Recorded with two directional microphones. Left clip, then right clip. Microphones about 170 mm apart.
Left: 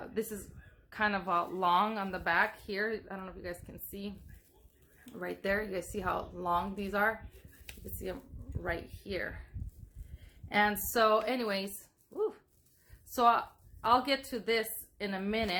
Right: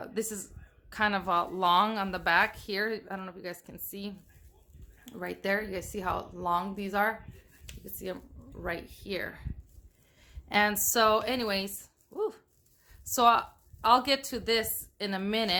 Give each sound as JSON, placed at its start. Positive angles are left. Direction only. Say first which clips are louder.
{"t": 0.0, "sound": "a sound", "louder": "right 2 dB", "side_deg": -20}
{"t": 0.9, "sound": "a woman's voice", "louder": "right 3 dB", "side_deg": -20}
{"t": 5.2, "sound": "a woman's voice", "louder": "right 2 dB", "side_deg": -25}
{"t": 8.6, "sound": "a woman's voice", "louder": "right 1 dB", "side_deg": -25}
{"t": 10.5, "sound": "a woman's voice", "louder": "right 3 dB", "side_deg": -25}